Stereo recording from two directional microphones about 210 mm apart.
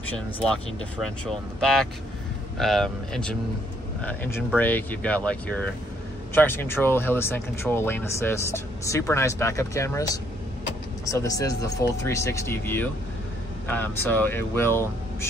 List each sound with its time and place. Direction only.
1.6 s speech: 5° left (ahead or behind)